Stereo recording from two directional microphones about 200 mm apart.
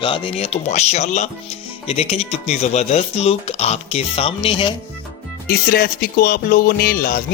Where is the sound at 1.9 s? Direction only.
30° left (ahead or behind).